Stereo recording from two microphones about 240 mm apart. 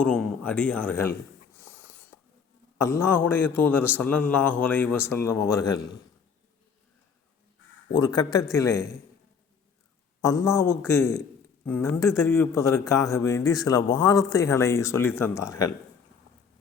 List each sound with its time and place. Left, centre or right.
0.0 s speech: centre
1.5 s a sound: centre
2.7 s a man's voice: centre
7.9 s a man's voice: centre
10.2 s a man's voice: centre